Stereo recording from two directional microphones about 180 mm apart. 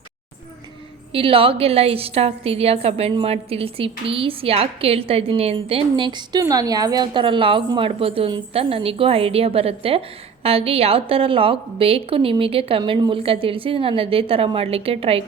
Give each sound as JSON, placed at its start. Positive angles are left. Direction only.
{"t": 1.1, "sound": "a woman's voice", "side_deg": -30}